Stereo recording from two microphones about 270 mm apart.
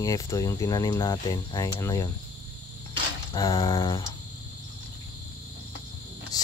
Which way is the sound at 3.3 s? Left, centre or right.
Centre.